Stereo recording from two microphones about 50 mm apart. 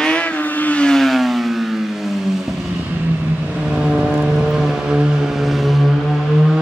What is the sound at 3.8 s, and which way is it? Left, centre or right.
Vehicle, right.